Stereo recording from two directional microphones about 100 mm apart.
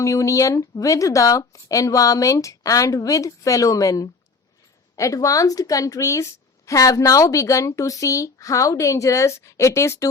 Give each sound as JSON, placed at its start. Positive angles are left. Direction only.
{"t": 0.0, "sound": "a woman's voice", "side_deg": 30}